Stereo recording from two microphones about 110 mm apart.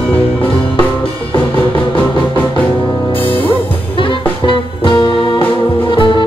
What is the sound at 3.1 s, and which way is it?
Music, 55° left (ahead or behind).